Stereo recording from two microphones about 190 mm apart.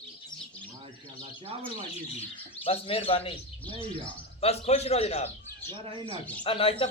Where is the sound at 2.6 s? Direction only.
30° left (ahead or behind).